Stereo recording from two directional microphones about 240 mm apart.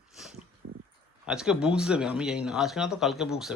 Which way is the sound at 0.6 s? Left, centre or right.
Right.